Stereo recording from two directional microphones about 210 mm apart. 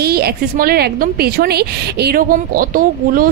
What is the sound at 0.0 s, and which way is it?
A woman's voice, 50° right (ahead or behind).